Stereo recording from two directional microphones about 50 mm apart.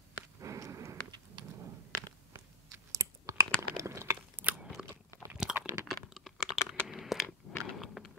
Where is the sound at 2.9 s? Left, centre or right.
Right.